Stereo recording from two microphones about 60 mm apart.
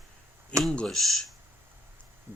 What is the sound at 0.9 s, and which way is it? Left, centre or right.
Speech, centre.